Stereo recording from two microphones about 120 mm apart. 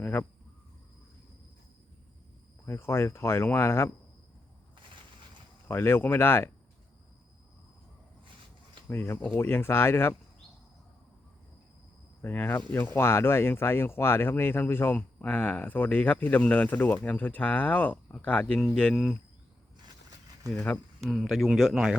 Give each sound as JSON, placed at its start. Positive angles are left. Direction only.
{"t": 0.0, "sound": "a sound", "side_deg": 15}
{"t": 2.6, "sound": "speech", "side_deg": 20}
{"t": 5.6, "sound": "speech", "side_deg": 20}
{"t": 8.9, "sound": "speech", "side_deg": 20}
{"t": 12.2, "sound": "speech", "side_deg": 15}
{"t": 21.0, "sound": "speech", "side_deg": 0}